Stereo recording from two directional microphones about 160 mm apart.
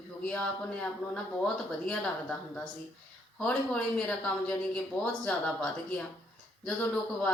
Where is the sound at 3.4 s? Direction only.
5° left (ahead or behind).